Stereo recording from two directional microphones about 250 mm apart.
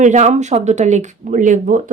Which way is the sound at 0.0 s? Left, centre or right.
Right.